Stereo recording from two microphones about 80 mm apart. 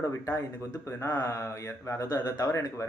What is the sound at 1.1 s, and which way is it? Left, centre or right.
Speech, left.